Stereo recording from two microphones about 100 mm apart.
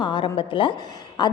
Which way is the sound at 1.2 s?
45° left (ahead or behind).